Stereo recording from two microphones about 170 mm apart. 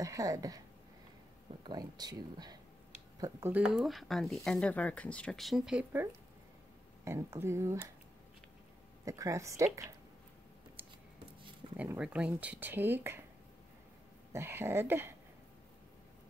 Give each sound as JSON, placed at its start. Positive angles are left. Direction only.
{"t": 0.0, "sound": "speech", "side_deg": -20}
{"t": 1.7, "sound": "speech", "side_deg": -25}
{"t": 7.1, "sound": "speech", "side_deg": -15}
{"t": 9.0, "sound": "speech", "side_deg": -20}
{"t": 11.7, "sound": "speech", "side_deg": -10}
{"t": 14.3, "sound": "speech", "side_deg": -15}